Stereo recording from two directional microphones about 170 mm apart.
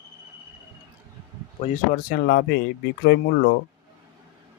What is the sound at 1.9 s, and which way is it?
Speech, 70° left (ahead or behind).